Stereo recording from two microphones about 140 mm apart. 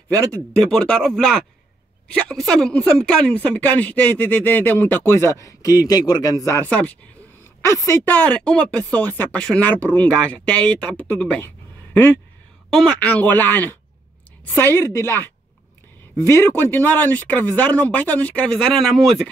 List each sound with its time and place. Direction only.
0.5 s speech: 5° left (ahead or behind)
7.6 s speech: 20° left (ahead or behind); by 19.2 s centre (ahead or behind)